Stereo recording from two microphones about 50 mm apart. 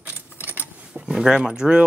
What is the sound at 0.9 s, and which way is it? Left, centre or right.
Speech, centre.